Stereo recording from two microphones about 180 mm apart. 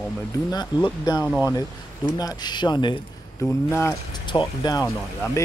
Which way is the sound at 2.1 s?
20° left (ahead or behind).